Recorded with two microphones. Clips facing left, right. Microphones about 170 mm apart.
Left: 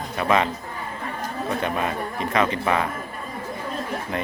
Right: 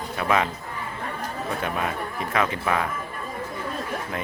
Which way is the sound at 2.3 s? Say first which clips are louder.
Left 2 dB; centre (ahead or behind).